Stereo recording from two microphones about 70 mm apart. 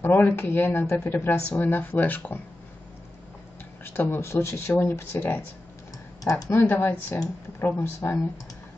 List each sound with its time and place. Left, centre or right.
0.0 s speech: left
3.8 s speech: left
6.3 s speech: left
6.7 s speech: left